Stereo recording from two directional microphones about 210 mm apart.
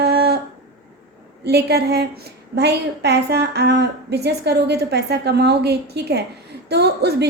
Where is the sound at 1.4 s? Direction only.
50° right (ahead or behind).